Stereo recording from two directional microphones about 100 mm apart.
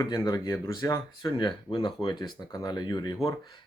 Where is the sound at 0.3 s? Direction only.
40° left (ahead or behind).